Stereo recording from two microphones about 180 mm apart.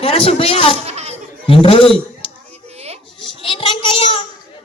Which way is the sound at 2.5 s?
35° right (ahead or behind).